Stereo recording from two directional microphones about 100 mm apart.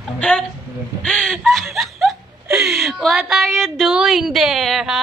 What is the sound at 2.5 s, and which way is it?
A woman's voice, 10° right (ahead or behind).